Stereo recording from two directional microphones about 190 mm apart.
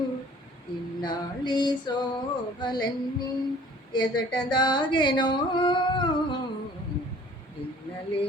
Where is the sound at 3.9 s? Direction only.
25° left (ahead or behind).